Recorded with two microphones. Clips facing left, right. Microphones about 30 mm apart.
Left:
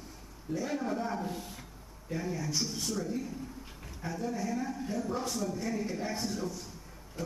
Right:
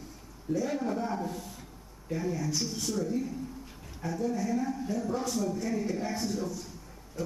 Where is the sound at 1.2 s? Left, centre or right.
Centre.